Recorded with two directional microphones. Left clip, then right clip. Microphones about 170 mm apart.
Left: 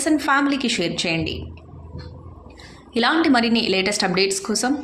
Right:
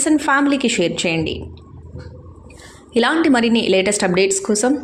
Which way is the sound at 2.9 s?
20° right (ahead or behind).